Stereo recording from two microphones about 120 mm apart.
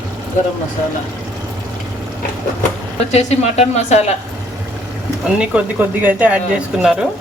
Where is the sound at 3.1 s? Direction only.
70° left (ahead or behind).